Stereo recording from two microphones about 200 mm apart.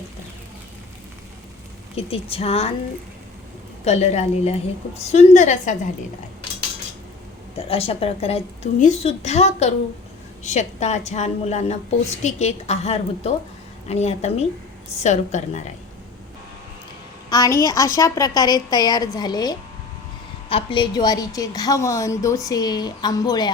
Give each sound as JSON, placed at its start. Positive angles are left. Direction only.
{"t": 2.0, "sound": "a woman's voice", "side_deg": 30}
{"t": 3.8, "sound": "a woman's voice", "side_deg": 35}
{"t": 7.5, "sound": "a woman's voice", "side_deg": 30}
{"t": 17.2, "sound": "a woman's voice", "side_deg": 15}